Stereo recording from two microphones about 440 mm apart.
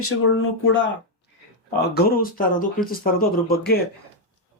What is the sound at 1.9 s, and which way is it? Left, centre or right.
Speech, left.